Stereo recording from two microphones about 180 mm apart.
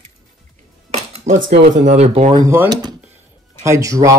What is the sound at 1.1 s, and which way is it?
Cutlery, 40° right (ahead or behind).